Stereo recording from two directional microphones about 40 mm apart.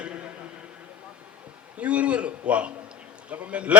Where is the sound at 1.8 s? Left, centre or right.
Right.